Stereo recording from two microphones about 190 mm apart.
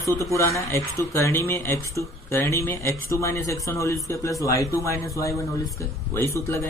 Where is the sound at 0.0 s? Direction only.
15° left (ahead or behind).